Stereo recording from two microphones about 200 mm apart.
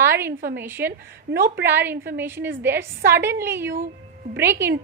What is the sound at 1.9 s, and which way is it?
Speech, 50° right (ahead or behind).